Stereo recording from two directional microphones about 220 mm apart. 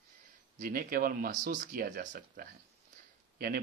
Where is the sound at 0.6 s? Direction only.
40° right (ahead or behind).